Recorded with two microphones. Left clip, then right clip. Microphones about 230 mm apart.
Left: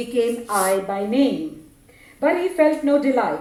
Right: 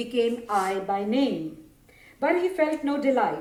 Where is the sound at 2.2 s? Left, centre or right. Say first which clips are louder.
Left 6 dB; right.